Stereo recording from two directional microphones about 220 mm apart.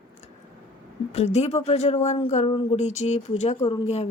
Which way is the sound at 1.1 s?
30° left (ahead or behind).